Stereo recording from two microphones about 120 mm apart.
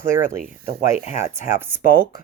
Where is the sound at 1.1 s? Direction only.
20° right (ahead or behind).